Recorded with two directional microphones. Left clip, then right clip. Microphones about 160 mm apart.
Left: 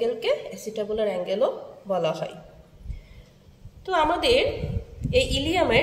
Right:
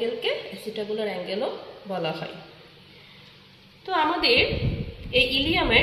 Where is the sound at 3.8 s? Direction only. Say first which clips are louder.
Left 1 dB; 30° left (ahead or behind).